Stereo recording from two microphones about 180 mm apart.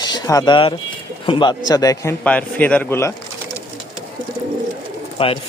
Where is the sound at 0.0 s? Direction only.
20° left (ahead or behind).